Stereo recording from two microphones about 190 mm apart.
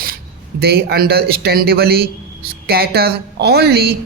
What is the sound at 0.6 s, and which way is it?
A man's voice, 55° right (ahead or behind).